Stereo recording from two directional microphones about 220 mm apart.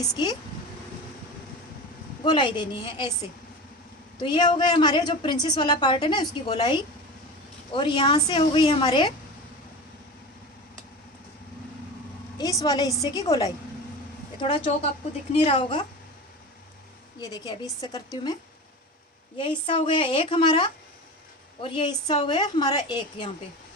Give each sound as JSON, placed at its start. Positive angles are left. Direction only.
{"t": 0.0, "sound": "a woman's voice", "side_deg": 20}
{"t": 2.2, "sound": "a woman's voice", "side_deg": 20}
{"t": 4.2, "sound": "a woman's voice", "side_deg": 20}
{"t": 12.4, "sound": "a woman's voice", "side_deg": 15}
{"t": 17.2, "sound": "a woman's voice", "side_deg": 20}
{"t": 19.4, "sound": "a woman's voice", "side_deg": 25}